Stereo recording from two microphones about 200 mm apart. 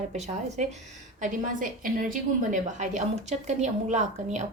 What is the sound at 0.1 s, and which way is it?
A woman's voice, 35° right (ahead or behind).